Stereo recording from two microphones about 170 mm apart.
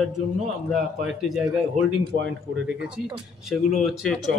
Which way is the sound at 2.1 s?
90° right.